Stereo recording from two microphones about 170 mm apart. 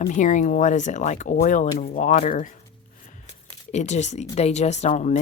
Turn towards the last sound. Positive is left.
turn(degrees=45)  # may be behind; listen again after turning